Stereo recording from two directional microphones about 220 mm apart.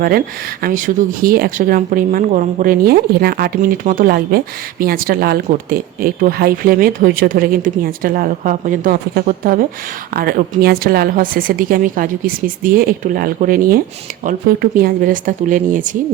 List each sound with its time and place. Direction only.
0.6 s speech: 40° right (ahead or behind)